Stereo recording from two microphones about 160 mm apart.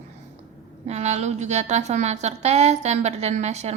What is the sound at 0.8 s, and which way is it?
A woman's voice, 45° right (ahead or behind).